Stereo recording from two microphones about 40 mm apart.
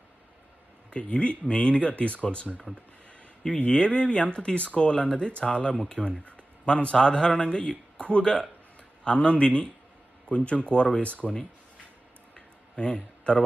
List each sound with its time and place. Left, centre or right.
0.9 s speech: left
3.7 s speech: left
6.2 s a sound: left
6.9 s speech: centre; by 11.3 s left
12.7 s a man's voice: left